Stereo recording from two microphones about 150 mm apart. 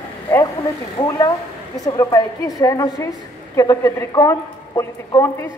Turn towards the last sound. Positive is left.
turn(degrees=15)  # may be behind; listen again after turning